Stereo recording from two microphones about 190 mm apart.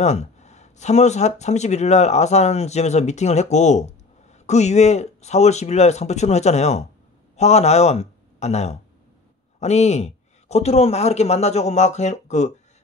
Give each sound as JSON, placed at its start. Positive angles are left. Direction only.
{"t": 0.0, "sound": "a man's voice", "side_deg": 35}